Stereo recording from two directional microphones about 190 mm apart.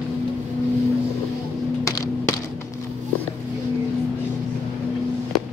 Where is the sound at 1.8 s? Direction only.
20° left (ahead or behind).